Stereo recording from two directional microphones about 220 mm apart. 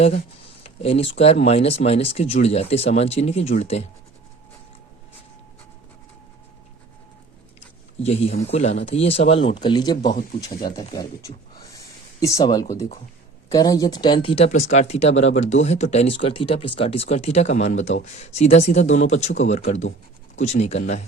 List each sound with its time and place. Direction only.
0.6 s a sound: 25° left (ahead or behind)
1.2 s speech: 30° left (ahead or behind)
8.0 s speech: 30° left (ahead or behind)